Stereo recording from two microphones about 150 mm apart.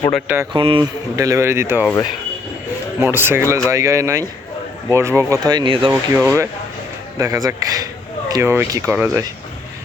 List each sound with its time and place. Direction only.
0.5 s speech: 35° right (ahead or behind)
1.1 s speech: 20° right (ahead or behind)
3.0 s speech: 15° right (ahead or behind); by 5.9 s 35° right (ahead or behind)
5.9 s speech: 15° right (ahead or behind)